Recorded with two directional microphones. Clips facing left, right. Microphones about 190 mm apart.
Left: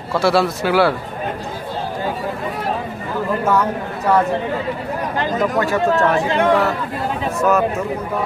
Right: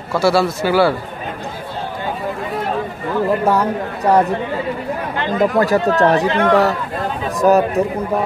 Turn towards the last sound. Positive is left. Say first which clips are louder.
# right 4 dB
turn(degrees=-35)  # may be behind; listen again after turning